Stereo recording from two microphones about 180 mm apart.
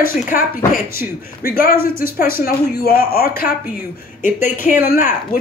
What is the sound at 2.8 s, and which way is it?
Speech, 55° left (ahead or behind).